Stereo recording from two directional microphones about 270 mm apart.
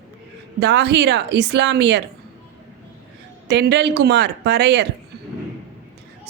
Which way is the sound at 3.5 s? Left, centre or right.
Right.